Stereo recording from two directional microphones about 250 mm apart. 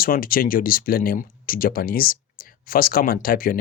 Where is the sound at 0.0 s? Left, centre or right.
Left.